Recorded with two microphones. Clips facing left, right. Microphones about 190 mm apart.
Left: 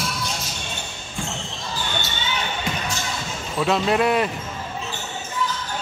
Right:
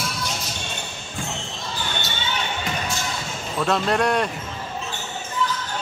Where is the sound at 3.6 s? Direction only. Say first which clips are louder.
Left 1 dB; 5° left (ahead or behind).